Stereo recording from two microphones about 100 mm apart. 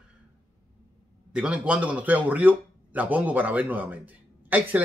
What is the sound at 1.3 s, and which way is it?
Speech, 10° right (ahead or behind).